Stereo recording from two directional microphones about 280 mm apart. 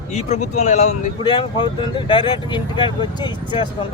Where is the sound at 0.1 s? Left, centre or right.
Left.